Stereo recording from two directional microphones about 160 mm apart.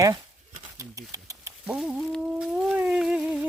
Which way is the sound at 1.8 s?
5° right (ahead or behind).